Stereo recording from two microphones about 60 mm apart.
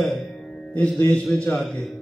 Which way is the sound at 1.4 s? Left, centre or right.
Centre.